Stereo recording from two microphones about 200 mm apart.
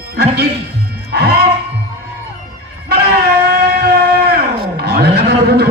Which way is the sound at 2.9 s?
55° right (ahead or behind).